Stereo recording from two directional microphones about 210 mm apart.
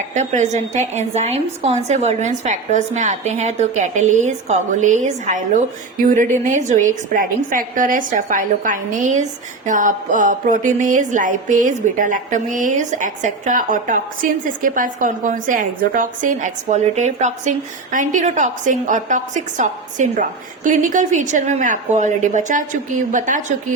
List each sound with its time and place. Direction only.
0.1 s speech: 35° right (ahead or behind)